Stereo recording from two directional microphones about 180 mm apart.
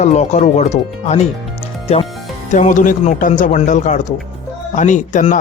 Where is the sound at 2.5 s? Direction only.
45° left (ahead or behind).